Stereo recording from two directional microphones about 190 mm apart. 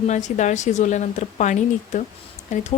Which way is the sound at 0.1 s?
40° left (ahead or behind).